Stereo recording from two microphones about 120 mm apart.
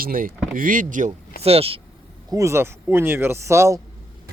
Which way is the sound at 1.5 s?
55° right (ahead or behind).